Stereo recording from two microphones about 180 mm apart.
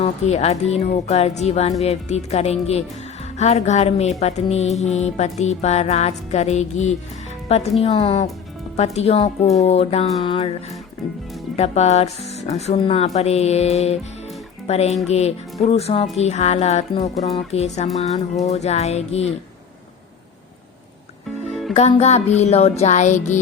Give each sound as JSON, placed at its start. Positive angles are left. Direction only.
{"t": 0.0, "sound": "music", "side_deg": 35}
{"t": 7.4, "sound": "speech", "side_deg": 35}
{"t": 7.8, "sound": "music", "side_deg": 35}
{"t": 11.5, "sound": "music", "side_deg": 35}
{"t": 21.8, "sound": "music", "side_deg": 35}